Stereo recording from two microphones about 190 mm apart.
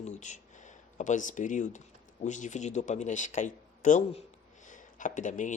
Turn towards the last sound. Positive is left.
turn(degrees=40)  # may be behind; listen again after turning